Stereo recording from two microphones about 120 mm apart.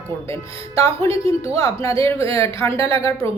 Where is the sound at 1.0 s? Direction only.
55° right (ahead or behind).